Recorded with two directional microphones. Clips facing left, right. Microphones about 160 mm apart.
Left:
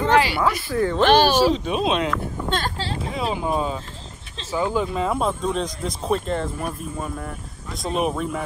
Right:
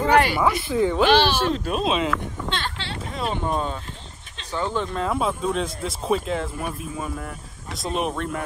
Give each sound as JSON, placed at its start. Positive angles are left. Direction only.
{"t": 0.4, "sound": "speech", "side_deg": -20}
{"t": 1.0, "sound": "speech", "side_deg": 45}
{"t": 1.4, "sound": "speech", "side_deg": 0}
{"t": 2.5, "sound": "speech", "side_deg": 40}
{"t": 3.1, "sound": "speech", "side_deg": 0}